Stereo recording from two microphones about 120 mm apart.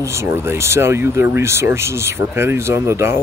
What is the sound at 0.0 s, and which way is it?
Speech, 25° right (ahead or behind).